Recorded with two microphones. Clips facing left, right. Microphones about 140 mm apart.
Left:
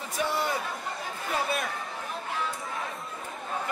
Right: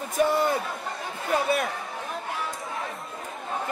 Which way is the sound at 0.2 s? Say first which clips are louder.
Right 7 dB; 50° right (ahead or behind).